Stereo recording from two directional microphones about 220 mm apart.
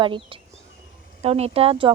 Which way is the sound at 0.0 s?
20° right (ahead or behind).